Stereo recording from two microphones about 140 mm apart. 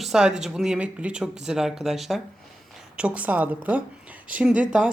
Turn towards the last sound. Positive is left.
turn(degrees=-5)  # may be behind; listen again after turning